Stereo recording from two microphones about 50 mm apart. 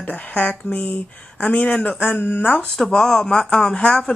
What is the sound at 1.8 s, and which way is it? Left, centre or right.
Speech, left.